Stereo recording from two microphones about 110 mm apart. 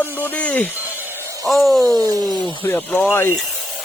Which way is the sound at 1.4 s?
Centre (ahead or behind).